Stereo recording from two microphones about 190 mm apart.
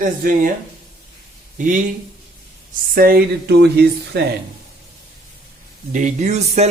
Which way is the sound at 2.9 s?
50° right (ahead or behind).